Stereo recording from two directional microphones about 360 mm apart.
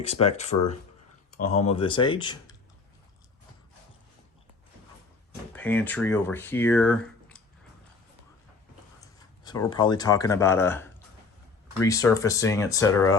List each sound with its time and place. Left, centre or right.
0.0 s speech: centre
5.5 s speech: centre
9.4 s speech: centre